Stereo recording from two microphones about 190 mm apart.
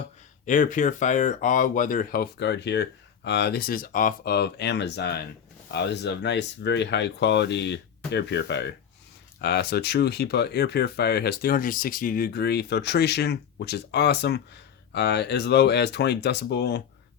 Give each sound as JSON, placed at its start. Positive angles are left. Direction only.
{"t": 0.4, "sound": "speech", "side_deg": 40}